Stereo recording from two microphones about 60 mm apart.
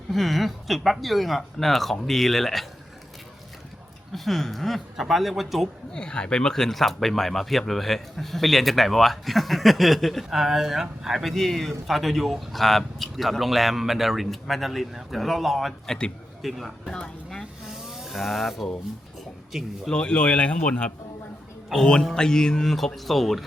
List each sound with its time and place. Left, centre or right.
0.1 s speech: centre
4.1 s speech: centre
5.9 s speech: centre
11.3 s speech: centre
17.7 s speech: centre
19.9 s speech: centre
22.1 s speech: centre